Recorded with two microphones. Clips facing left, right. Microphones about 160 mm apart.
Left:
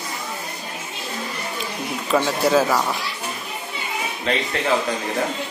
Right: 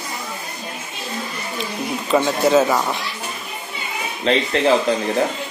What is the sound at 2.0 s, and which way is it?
Speech, centre (ahead or behind).